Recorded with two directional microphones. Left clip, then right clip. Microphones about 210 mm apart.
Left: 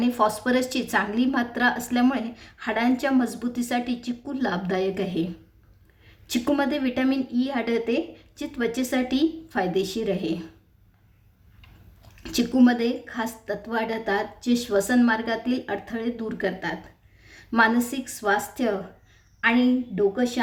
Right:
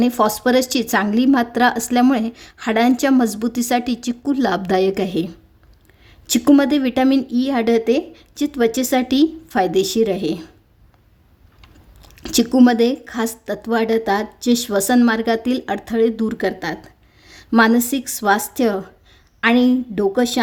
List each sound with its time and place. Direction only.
0.0 s a woman's voice: 50° right (ahead or behind)
12.1 s a woman's voice: 55° right (ahead or behind)